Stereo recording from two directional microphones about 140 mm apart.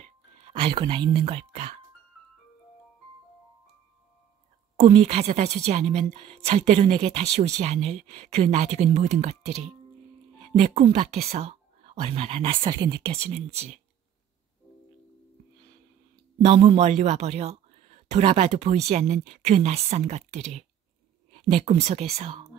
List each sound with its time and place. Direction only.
0.0 s music: 40° right (ahead or behind)
4.8 s a woman's voice: 45° right (ahead or behind); by 13.0 s 30° right (ahead or behind)
13.0 s a woman's voice: 50° right (ahead or behind)
16.5 s speech: 35° right (ahead or behind)
16.8 s a woman's voice: 55° right (ahead or behind)